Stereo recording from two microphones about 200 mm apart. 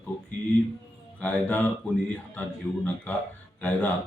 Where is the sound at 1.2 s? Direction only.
10° left (ahead or behind).